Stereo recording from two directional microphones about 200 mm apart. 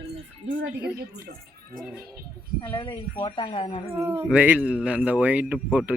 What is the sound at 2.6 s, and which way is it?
Speech, 20° left (ahead or behind).